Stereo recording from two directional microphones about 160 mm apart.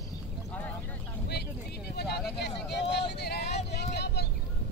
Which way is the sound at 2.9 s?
90° left.